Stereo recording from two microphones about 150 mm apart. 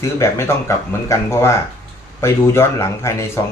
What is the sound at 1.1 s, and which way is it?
Chuckle, 20° left (ahead or behind).